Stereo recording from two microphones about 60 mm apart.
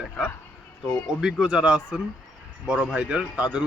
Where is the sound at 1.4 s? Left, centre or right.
Centre.